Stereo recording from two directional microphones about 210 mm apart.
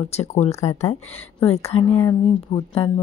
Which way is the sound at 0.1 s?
30° left (ahead or behind).